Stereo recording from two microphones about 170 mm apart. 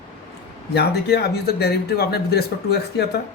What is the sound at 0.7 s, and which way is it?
Speech, 75° left (ahead or behind).